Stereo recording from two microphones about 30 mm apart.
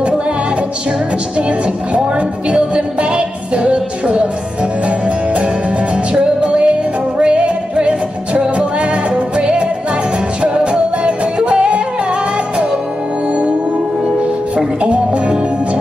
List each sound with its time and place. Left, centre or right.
3.0 s music: right
6.4 s music: right
14.8 s music: right